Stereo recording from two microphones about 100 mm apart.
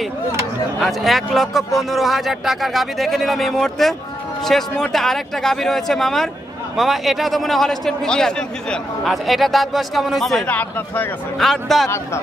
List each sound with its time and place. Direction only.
0.7 s a man's voice: centre (ahead or behind)
10.4 s speech: 15° left (ahead or behind)
11.3 s a man's voice: centre (ahead or behind)